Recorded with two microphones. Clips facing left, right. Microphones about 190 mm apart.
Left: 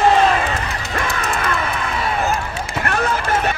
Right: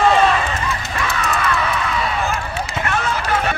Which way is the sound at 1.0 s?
50° left (ahead or behind).